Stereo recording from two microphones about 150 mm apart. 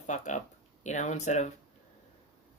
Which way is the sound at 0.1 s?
55° left (ahead or behind).